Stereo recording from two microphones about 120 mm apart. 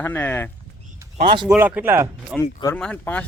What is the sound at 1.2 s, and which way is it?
Speech, 40° right (ahead or behind).